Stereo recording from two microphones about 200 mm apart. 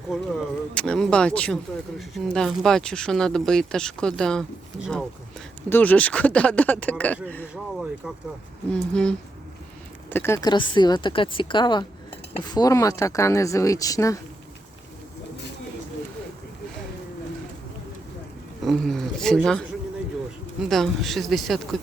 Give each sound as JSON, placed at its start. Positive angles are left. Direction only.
{"t": 0.7, "sound": "speech", "side_deg": 5}
{"t": 7.5, "sound": "speech", "side_deg": -5}
{"t": 18.6, "sound": "speech", "side_deg": 0}
{"t": 20.7, "sound": "speech", "side_deg": 0}